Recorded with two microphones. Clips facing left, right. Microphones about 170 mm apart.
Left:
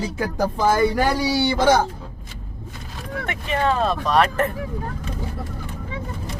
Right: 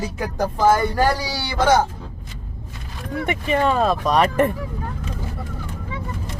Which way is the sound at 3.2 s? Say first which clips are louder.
Right 3 dB; 10° right (ahead or behind).